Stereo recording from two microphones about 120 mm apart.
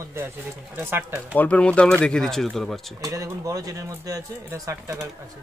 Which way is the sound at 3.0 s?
25° right (ahead or behind).